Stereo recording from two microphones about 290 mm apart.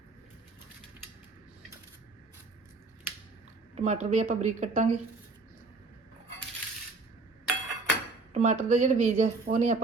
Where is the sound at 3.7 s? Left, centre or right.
Right.